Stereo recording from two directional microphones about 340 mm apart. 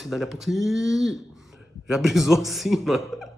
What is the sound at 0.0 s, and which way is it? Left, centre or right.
Speech, centre.